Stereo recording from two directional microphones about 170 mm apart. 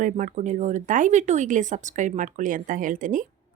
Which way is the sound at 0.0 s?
50° right (ahead or behind).